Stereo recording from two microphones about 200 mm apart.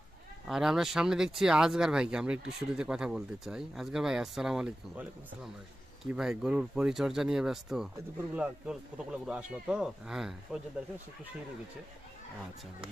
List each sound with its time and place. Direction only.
0.4 s speech: centre (ahead or behind)